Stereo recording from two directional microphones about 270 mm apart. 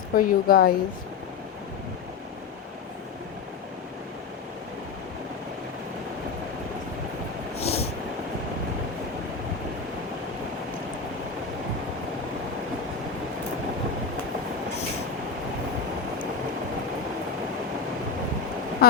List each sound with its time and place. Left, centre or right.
0.1 s a woman's voice: left
7.6 s vehicle: left
18.8 s a sound: left